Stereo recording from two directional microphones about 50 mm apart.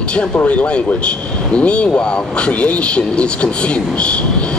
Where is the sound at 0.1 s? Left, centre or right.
Left.